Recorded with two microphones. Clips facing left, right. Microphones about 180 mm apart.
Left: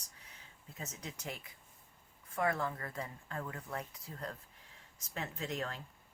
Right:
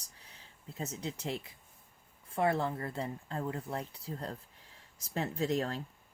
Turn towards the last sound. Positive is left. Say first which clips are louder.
# right 8 dB
turn(degrees=-35)  # may be behind; listen again after turning